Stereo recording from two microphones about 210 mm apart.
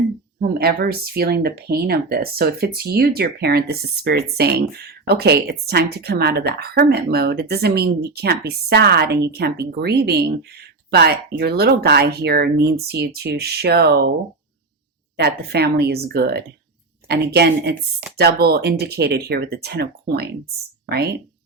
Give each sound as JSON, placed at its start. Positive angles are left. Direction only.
{"t": 0.3, "sound": "speech", "side_deg": -45}
{"t": 15.1, "sound": "speech", "side_deg": -50}